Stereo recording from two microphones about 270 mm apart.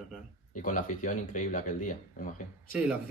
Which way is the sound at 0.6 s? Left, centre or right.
Left.